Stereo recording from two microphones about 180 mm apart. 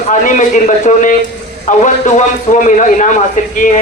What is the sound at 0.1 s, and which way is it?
A man's voice, 45° left (ahead or behind).